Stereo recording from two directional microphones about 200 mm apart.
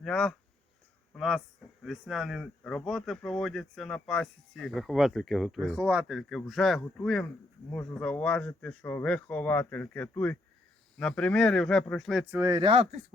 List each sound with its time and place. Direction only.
0.0 s speech: 5° left (ahead or behind)
5.5 s speech: 10° right (ahead or behind)
12.4 s speech: 20° right (ahead or behind)